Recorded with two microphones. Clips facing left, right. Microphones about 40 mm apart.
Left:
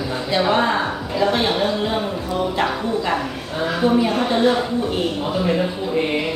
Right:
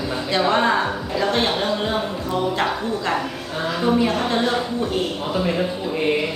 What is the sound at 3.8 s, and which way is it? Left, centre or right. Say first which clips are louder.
Speech: left 1 dB; centre.